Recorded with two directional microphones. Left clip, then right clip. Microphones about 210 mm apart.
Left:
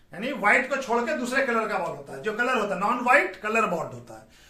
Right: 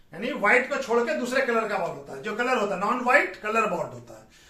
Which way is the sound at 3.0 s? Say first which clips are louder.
Left 1 dB; 30° left (ahead or behind).